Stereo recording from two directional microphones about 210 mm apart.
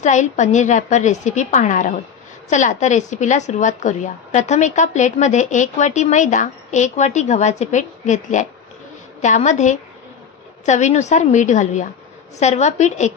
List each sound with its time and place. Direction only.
0.0 s a woman's voice: 35° left (ahead or behind)